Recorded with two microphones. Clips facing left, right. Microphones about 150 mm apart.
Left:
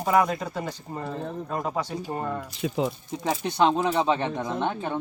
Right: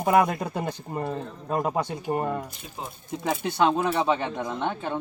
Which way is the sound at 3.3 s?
5° right (ahead or behind).